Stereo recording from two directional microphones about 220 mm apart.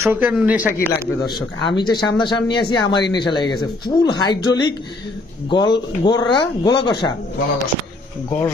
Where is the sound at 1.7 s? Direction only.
20° left (ahead or behind).